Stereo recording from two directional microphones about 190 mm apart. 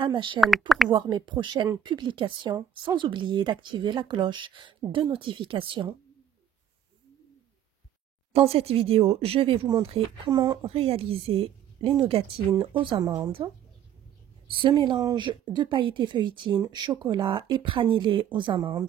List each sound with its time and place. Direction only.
0.0 s speech: 25° right (ahead or behind)
0.4 s speech: centre (ahead or behind)
0.8 s speech: 25° right (ahead or behind)
8.3 s speech: 30° right (ahead or behind)